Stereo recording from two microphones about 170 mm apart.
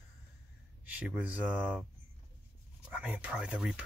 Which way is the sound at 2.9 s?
10° right (ahead or behind).